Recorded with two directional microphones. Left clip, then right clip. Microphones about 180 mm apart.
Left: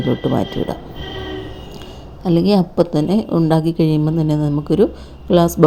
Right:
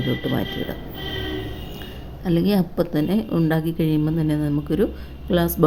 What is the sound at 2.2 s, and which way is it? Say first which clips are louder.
Speech: left 6 dB; 15° left (ahead or behind).